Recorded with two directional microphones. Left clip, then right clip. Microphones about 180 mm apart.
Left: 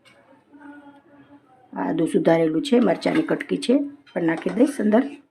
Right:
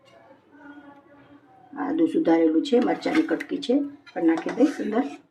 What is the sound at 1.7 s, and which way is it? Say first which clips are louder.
Speech: left 1 dB; 55° left (ahead or behind).